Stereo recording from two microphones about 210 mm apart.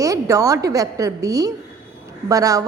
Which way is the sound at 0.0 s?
15° right (ahead or behind).